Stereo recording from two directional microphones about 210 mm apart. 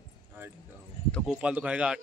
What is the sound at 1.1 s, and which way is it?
Speech, centre (ahead or behind).